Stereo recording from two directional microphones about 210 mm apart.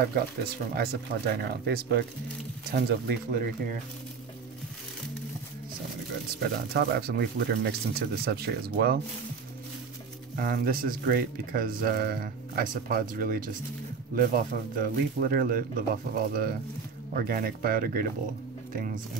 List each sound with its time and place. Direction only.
0.7 s speech: 45° right (ahead or behind)
6.4 s speech: 50° right (ahead or behind)
10.3 s speech: 45° right (ahead or behind)